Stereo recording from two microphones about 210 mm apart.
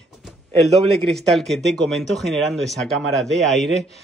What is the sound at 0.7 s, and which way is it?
Speech, 30° right (ahead or behind).